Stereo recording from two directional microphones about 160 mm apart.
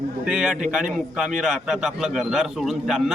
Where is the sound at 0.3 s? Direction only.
5° right (ahead or behind).